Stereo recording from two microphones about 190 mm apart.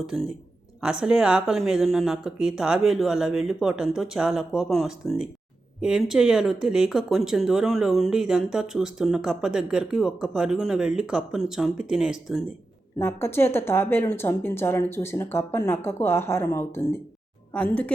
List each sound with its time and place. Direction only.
0.0 s speech: centre (ahead or behind)
13.0 s speech: 10° left (ahead or behind)